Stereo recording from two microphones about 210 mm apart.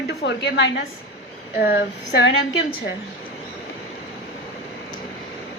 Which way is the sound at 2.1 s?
60° left (ahead or behind).